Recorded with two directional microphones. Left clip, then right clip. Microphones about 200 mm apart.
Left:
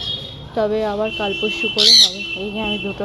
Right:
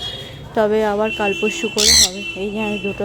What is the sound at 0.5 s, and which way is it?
Speech, 30° right (ahead or behind).